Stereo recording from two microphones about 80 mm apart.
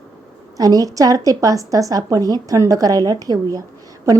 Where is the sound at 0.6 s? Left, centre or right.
Right.